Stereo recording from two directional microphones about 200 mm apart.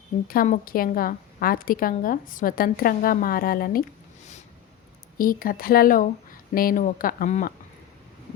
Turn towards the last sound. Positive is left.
turn(degrees=40)  # may be behind; listen again after turning